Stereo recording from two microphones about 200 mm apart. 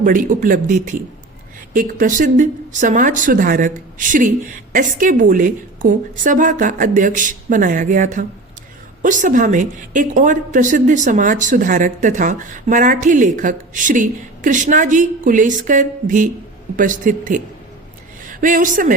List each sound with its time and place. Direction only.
0.0 s a woman's voice: 40° right (ahead or behind)